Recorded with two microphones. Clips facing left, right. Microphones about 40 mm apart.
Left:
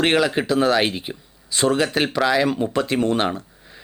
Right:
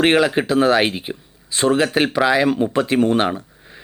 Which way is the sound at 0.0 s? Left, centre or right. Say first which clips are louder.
Right 3 dB; right.